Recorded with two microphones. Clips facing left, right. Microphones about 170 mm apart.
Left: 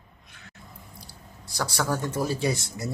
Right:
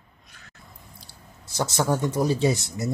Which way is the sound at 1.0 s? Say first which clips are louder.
Left 2 dB; 20° right (ahead or behind).